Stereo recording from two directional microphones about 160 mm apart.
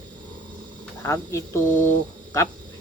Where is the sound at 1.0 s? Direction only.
15° left (ahead or behind).